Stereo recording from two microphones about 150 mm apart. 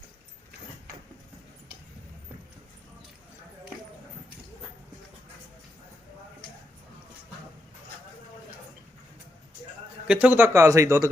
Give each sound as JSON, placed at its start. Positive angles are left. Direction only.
{"t": 10.1, "sound": "speech", "side_deg": -10}